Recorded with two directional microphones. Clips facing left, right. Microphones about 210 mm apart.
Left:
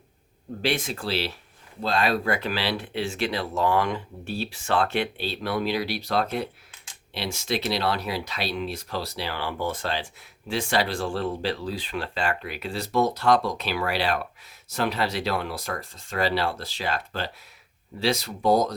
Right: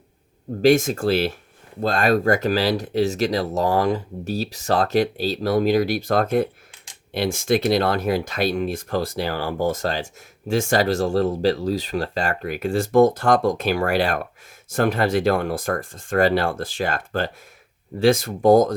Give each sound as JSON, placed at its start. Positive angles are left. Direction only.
{"t": 0.6, "sound": "speech", "side_deg": -45}